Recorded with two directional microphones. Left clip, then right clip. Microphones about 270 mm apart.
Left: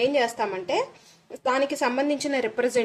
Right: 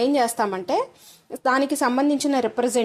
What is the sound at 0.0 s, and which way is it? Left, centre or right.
A woman's voice, right.